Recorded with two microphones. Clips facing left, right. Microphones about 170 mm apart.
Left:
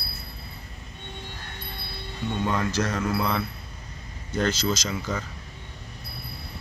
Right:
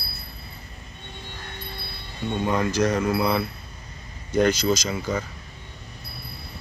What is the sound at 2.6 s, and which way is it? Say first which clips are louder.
Speech: right 4 dB; 15° right (ahead or behind).